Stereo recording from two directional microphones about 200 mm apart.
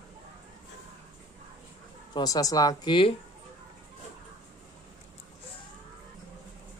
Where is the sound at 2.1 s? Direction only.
20° left (ahead or behind).